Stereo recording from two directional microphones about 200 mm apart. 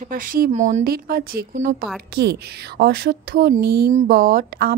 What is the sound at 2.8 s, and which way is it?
A woman's voice, 50° right (ahead or behind).